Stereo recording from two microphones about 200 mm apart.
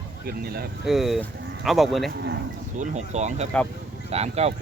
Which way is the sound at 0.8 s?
Centre (ahead or behind).